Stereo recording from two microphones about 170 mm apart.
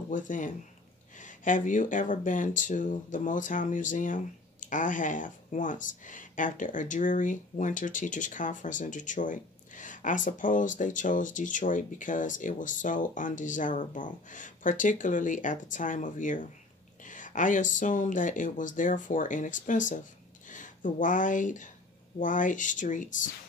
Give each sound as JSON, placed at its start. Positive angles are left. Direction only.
{"t": 0.1, "sound": "speech", "side_deg": 50}